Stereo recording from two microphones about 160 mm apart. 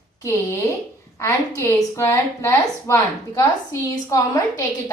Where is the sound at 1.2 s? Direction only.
15° left (ahead or behind).